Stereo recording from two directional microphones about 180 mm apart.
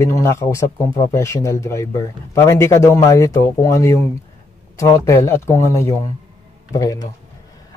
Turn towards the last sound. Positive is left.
turn(degrees=20)  # may be behind; listen again after turning